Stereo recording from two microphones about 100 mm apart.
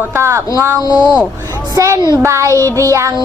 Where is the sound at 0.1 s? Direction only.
30° right (ahead or behind).